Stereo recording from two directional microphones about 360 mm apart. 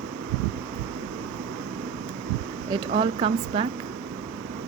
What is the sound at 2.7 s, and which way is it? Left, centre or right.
Speech, centre.